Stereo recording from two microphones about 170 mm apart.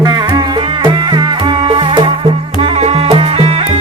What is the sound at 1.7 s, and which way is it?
Music, 30° right (ahead or behind).